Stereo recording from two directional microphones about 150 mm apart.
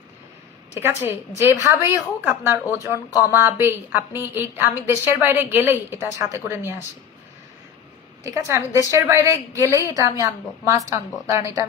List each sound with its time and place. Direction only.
0.7 s a woman's voice: 15° right (ahead or behind)
8.2 s a woman's voice: 20° right (ahead or behind)